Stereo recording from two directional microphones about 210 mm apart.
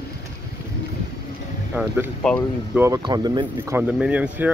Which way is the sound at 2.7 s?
15° right (ahead or behind).